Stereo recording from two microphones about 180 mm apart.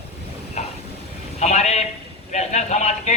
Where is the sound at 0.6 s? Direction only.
40° left (ahead or behind).